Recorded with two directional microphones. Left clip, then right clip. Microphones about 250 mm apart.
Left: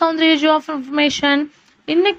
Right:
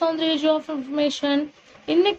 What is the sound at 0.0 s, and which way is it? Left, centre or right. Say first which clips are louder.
A woman's voice: left 7 dB; left.